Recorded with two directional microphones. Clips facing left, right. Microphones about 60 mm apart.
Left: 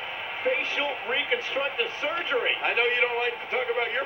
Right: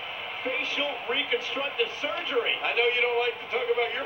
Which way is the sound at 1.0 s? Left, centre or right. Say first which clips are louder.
Left 1 dB; left.